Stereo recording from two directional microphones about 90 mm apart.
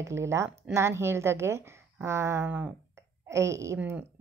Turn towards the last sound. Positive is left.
turn(degrees=-35)  # may be behind; listen again after turning